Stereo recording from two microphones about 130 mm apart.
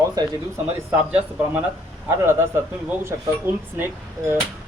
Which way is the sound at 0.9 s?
10° right (ahead or behind).